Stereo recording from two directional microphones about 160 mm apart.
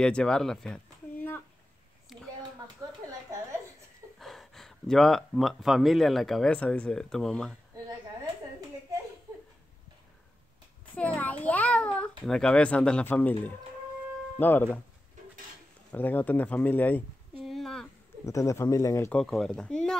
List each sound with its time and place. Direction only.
0.0 s speech: 5° left (ahead or behind)
4.2 s speech: centre (ahead or behind)
11.0 s a sound: 10° left (ahead or behind)
12.3 s speech: 5° left (ahead or behind)
14.4 s speech: 10° left (ahead or behind)
15.9 s speech: 10° left (ahead or behind)
17.4 s a sound: centre (ahead or behind)
18.2 s speech: 20° left (ahead or behind)
19.1 s speech: 5° left (ahead or behind)